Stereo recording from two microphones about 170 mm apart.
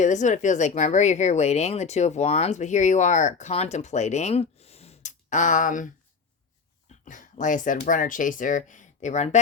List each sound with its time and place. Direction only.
0.0 s speech: 45° left (ahead or behind)
7.0 s speech: 50° left (ahead or behind)